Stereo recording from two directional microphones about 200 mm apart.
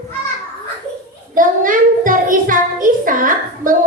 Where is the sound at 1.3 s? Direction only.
40° right (ahead or behind).